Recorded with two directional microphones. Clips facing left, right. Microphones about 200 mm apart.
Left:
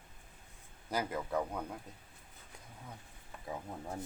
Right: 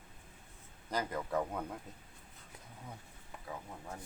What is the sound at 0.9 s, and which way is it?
Speech, 5° left (ahead or behind).